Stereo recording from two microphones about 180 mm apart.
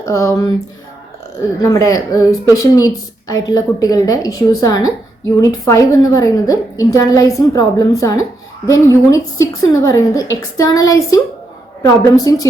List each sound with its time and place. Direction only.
0.0 s speech: 15° left (ahead or behind)
1.8 s a woman's voice: 20° left (ahead or behind)